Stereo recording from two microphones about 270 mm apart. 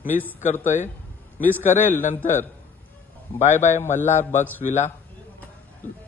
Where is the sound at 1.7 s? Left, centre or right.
Centre.